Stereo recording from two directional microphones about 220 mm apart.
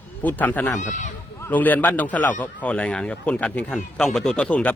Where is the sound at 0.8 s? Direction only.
35° left (ahead or behind).